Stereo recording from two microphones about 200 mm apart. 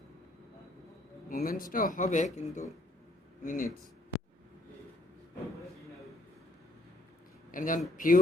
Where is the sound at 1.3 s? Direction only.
45° left (ahead or behind).